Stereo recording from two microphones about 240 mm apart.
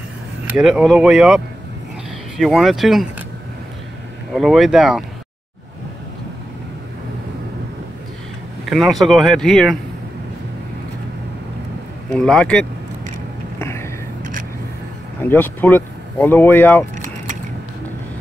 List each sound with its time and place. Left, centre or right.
0.6 s speech: centre
4.3 s speech: centre
8.6 s speech: centre
12.1 s speech: centre
13.6 s a sound: centre
15.2 s speech: centre
16.9 s mechanisms: right